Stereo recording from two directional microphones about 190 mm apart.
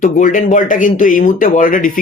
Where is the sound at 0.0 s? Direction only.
40° left (ahead or behind).